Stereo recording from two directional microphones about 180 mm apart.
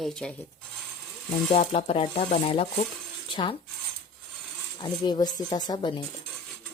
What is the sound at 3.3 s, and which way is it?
Cutlery, 25° left (ahead or behind).